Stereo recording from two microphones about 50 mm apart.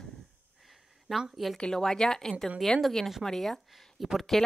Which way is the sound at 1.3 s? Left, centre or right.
Centre.